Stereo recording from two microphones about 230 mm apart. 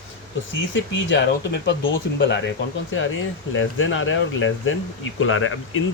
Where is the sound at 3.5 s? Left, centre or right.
Left.